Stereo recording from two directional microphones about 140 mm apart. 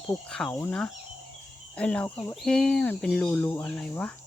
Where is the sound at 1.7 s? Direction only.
10° left (ahead or behind).